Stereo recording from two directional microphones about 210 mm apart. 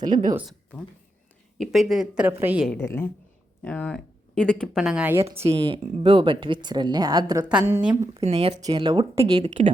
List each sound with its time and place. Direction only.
0.1 s speech: 40° right (ahead or behind)
1.5 s speech: centre (ahead or behind)
2.6 s a woman's voice: 10° left (ahead or behind); by 5.2 s 5° right (ahead or behind)
5.5 s speech: 25° right (ahead or behind)
7.4 s a woman's voice: 10° right (ahead or behind)
8.1 s speech: 30° right (ahead or behind)